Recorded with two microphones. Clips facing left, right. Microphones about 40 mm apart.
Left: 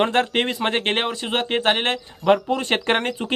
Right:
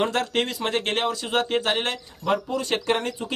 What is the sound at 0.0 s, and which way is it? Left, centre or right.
Speech, left.